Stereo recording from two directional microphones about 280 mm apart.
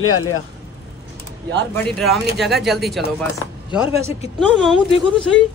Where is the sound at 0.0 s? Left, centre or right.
Left.